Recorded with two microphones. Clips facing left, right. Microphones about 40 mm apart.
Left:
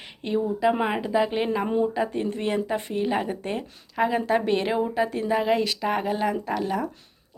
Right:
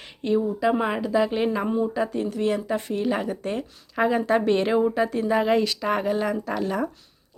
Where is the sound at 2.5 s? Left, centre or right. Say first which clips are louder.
Right 1 dB; centre.